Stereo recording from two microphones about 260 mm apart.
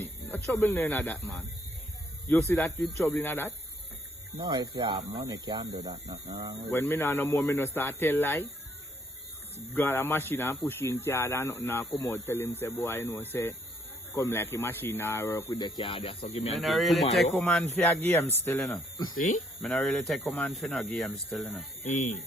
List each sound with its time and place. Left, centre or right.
0.0 s speech: centre
2.5 s speech: centre
4.4 s speech: centre
6.7 s speech: centre
9.7 s speech: centre; by 16.6 s left
16.6 s speech: centre
19.1 s speech: left
19.6 s speech: centre
21.8 s speech: left